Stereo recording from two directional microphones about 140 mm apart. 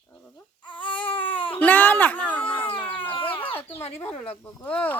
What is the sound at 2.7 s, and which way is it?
Baby cry, 15° left (ahead or behind).